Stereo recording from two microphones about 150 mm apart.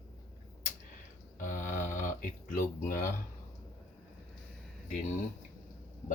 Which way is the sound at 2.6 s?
65° left (ahead or behind).